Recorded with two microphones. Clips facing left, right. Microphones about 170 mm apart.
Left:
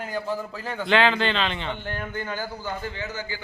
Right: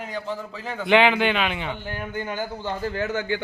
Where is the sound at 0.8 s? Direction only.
15° right (ahead or behind).